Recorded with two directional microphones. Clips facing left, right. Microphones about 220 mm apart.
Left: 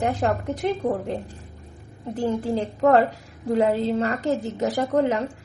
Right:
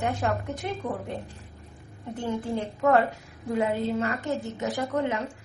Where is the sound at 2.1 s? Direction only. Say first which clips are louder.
Left 5 dB; 35° left (ahead or behind).